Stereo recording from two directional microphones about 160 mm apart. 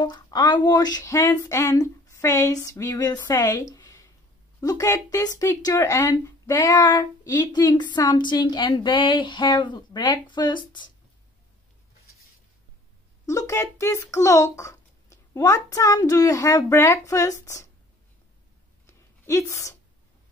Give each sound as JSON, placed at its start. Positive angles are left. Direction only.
{"t": 0.0, "sound": "speech", "side_deg": 25}
{"t": 13.3, "sound": "speech", "side_deg": 20}
{"t": 18.9, "sound": "a sound", "side_deg": 20}